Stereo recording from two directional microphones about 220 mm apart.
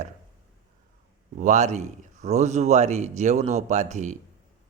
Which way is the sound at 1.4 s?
30° right (ahead or behind).